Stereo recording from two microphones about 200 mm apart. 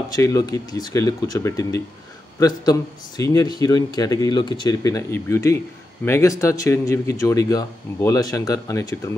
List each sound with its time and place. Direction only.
0.1 s speech: 15° left (ahead or behind)